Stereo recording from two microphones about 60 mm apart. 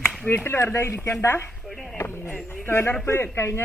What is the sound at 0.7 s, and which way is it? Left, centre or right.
Speech, left.